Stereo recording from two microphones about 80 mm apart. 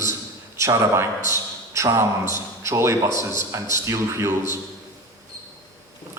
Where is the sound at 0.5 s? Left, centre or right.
Right.